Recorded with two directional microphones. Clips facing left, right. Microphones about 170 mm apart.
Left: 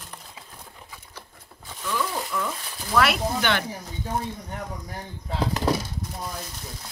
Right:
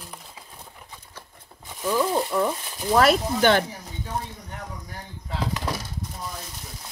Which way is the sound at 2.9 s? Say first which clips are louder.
Right 3 dB; 40° right (ahead or behind).